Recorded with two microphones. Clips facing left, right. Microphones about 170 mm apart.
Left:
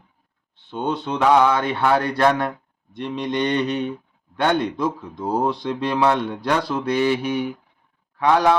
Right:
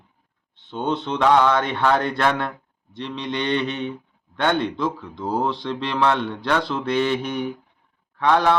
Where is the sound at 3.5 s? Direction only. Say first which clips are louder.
Left 2 dB; 10° left (ahead or behind).